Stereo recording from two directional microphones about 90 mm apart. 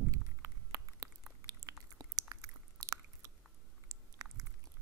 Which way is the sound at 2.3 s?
40° right (ahead or behind).